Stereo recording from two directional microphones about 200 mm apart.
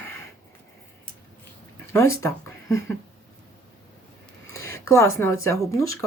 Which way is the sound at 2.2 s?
15° left (ahead or behind).